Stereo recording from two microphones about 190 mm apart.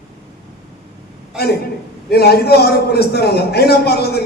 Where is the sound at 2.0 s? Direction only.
55° left (ahead or behind).